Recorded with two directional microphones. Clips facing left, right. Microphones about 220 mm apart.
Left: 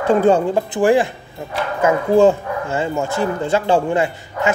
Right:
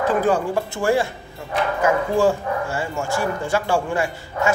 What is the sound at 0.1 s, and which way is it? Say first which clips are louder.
Speech: left 9 dB; 25° left (ahead or behind).